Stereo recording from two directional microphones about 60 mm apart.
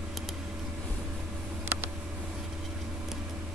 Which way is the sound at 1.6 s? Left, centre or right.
Right.